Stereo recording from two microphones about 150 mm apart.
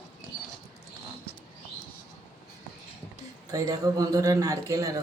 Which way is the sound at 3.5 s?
25° right (ahead or behind).